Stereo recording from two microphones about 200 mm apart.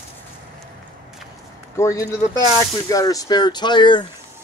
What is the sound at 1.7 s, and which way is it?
Speech, 15° left (ahead or behind).